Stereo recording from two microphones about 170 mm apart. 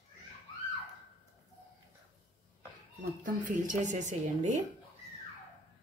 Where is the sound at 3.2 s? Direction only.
50° right (ahead or behind).